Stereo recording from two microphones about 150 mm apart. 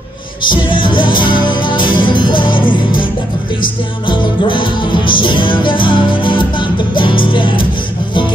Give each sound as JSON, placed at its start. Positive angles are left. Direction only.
{"t": 0.5, "sound": "music", "side_deg": 35}
{"t": 4.1, "sound": "music", "side_deg": 30}